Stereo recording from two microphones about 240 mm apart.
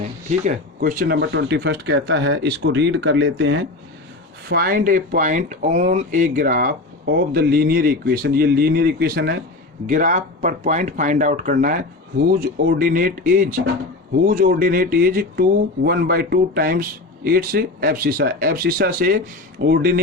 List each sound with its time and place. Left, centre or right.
0.0 s speech: right
4.4 s speech: right